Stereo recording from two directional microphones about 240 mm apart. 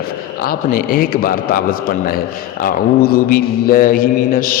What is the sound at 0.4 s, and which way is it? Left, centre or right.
A man's voice, left.